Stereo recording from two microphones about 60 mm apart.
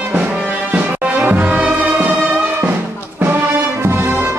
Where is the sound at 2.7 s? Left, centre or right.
Right.